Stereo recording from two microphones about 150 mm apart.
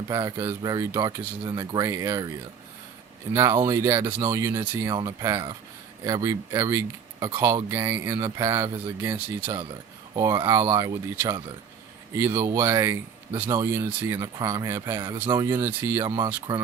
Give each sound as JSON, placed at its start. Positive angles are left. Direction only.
{"t": 0.1, "sound": "speech", "side_deg": -20}
{"t": 3.3, "sound": "speech", "side_deg": -20}
{"t": 16.0, "sound": "speech", "side_deg": -30}